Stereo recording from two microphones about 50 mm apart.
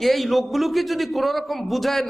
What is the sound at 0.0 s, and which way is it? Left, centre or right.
A man's voice, centre.